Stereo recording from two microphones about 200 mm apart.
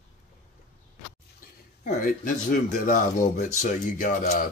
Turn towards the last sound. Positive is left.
turn(degrees=40)  # may be behind; listen again after turning